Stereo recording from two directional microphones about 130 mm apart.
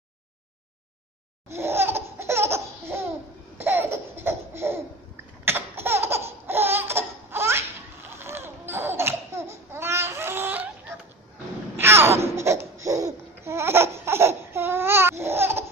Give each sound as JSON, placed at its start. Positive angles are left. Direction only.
{"t": 1.5, "sound": "laughter", "side_deg": -20}
{"t": 8.2, "sound": "babbling", "side_deg": -20}
{"t": 11.7, "sound": "a sound", "side_deg": -15}
{"t": 12.4, "sound": "laughter", "side_deg": -20}